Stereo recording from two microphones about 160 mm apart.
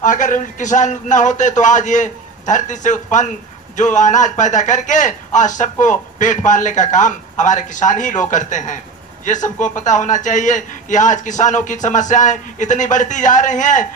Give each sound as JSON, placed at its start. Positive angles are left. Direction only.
{"t": 0.0, "sound": "speech", "side_deg": 55}